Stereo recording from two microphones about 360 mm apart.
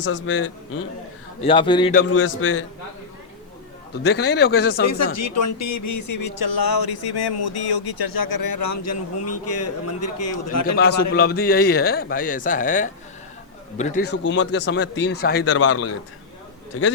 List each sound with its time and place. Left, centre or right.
0.0 s a man's voice: left
1.4 s a man's voice: centre
2.0 s a man's voice: left
4.0 s speech: left
5.1 s speech: left
10.8 s speech: left